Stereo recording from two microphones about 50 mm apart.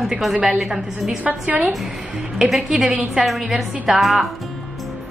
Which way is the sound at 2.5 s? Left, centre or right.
Centre.